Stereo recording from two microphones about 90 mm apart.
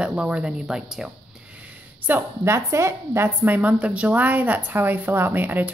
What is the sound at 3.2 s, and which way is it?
A woman's voice, 15° right (ahead or behind).